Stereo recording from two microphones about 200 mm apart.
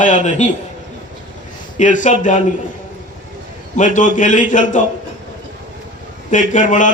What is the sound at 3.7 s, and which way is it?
A man's voice, 40° left (ahead or behind).